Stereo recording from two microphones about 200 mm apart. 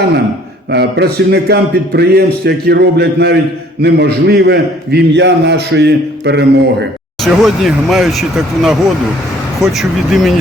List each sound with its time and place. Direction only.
0.7 s a man's voice: 55° right (ahead or behind)
7.3 s speech: centre (ahead or behind)